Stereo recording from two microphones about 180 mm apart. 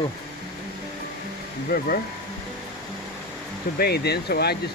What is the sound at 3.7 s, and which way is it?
Speech, 60° left (ahead or behind).